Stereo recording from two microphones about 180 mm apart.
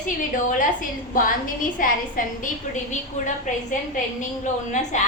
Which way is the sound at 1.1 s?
50° left (ahead or behind).